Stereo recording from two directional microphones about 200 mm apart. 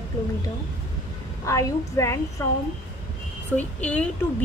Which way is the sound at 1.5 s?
15° left (ahead or behind).